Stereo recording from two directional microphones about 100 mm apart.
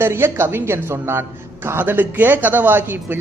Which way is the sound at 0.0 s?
25° right (ahead or behind).